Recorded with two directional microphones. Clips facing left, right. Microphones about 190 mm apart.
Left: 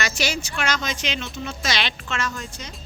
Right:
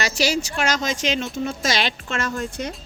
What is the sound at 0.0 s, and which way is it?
Speech, 35° right (ahead or behind).